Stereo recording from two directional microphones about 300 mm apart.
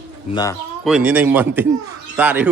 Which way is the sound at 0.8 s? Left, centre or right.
Centre.